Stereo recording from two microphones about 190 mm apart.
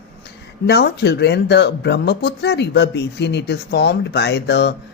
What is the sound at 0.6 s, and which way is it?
Speech, 60° left (ahead or behind).